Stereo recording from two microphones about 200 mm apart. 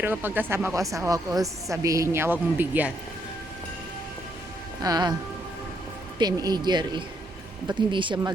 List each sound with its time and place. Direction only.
0.0 s a woman's voice: 10° right (ahead or behind)
4.8 s speech: 20° right (ahead or behind)
6.1 s speech: 20° right (ahead or behind)